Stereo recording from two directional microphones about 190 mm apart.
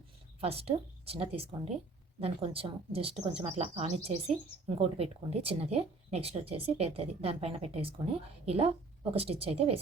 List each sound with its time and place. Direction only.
0.3 s speech: 30° right (ahead or behind)